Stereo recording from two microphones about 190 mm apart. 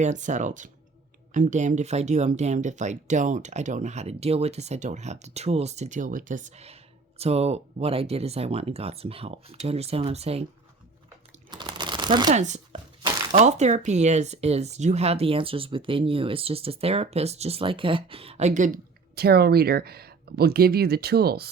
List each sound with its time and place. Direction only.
0.0 s speech: 40° right (ahead or behind)
11.5 s a sound: 25° right (ahead or behind)
12.3 s speech: 35° right (ahead or behind)
19.1 s speech: 55° right (ahead or behind)